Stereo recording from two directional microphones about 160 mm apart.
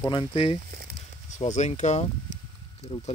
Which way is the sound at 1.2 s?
50° left (ahead or behind).